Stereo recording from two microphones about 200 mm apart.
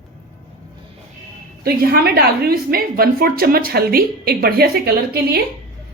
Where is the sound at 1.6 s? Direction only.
50° right (ahead or behind).